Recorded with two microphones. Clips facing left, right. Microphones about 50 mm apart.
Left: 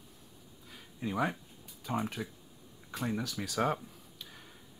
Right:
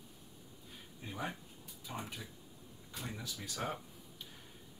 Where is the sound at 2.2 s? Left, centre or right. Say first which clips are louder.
Left 9 dB; left.